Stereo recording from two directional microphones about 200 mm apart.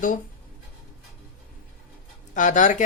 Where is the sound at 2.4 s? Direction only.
40° left (ahead or behind).